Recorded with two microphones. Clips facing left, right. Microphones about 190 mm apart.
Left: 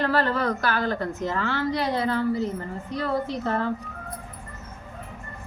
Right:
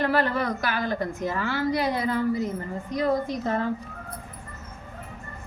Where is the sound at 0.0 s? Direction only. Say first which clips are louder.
Even; 15° right (ahead or behind).